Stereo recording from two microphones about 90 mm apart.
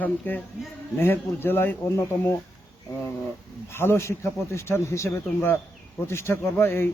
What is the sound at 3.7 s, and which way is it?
Speech, 25° left (ahead or behind).